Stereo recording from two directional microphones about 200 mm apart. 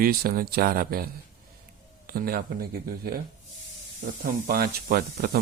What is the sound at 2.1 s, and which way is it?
Speech, 45° right (ahead or behind).